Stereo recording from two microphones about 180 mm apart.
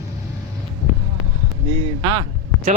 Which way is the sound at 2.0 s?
25° right (ahead or behind).